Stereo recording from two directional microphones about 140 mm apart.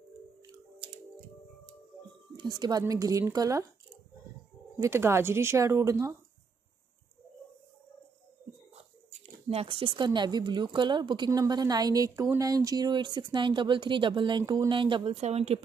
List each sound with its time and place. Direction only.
2.3 s speech: 30° right (ahead or behind)
4.7 s speech: 20° right (ahead or behind)
9.1 s speech: 45° right (ahead or behind)